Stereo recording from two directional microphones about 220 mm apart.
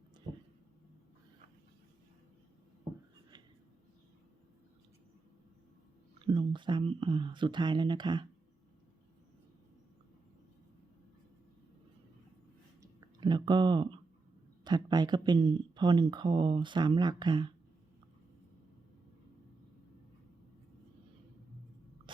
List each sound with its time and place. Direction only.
6.2 s speech: 20° right (ahead or behind)
12.8 s a sound: 15° right (ahead or behind)
14.6 s speech: 20° right (ahead or behind)